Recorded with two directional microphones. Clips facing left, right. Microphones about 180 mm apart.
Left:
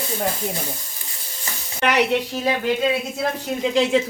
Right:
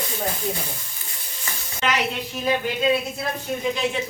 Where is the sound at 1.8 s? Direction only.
65° left (ahead or behind).